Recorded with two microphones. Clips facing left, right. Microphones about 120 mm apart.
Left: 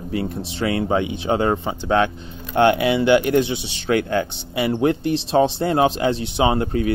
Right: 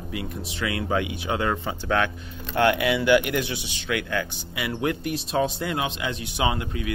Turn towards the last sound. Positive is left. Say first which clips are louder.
# left 8 dB
turn(degrees=40)  # may be behind; listen again after turning